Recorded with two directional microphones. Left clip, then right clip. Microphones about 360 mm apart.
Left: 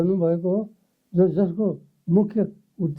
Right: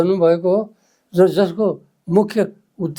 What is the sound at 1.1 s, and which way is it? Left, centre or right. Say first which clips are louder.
Speech: right 7 dB; centre.